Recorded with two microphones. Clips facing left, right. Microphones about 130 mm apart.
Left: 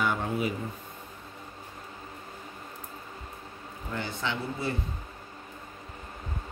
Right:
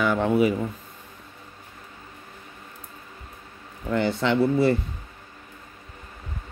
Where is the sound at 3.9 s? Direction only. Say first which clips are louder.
Right 11 dB; 75° right (ahead or behind).